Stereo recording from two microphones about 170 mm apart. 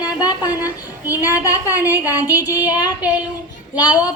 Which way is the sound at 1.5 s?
20° left (ahead or behind).